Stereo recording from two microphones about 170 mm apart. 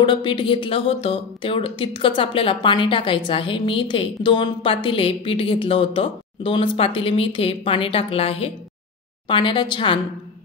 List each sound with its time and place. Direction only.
0.0 s speech: 30° left (ahead or behind)